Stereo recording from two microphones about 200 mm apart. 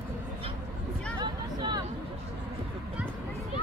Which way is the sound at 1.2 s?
20° right (ahead or behind).